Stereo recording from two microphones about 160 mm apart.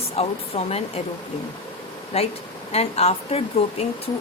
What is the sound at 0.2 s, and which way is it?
Speech, 40° left (ahead or behind).